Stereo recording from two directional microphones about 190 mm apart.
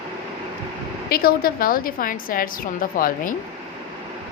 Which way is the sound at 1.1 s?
50° left (ahead or behind).